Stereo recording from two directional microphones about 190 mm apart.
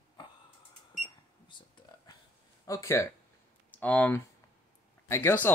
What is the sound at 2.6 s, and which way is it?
Speech, 15° left (ahead or behind).